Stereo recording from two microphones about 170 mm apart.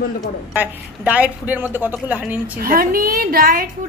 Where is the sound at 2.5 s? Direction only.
60° right (ahead or behind).